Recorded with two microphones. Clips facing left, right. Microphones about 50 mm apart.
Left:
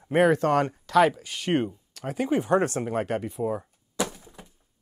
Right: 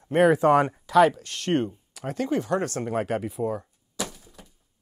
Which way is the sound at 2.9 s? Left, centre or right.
Centre.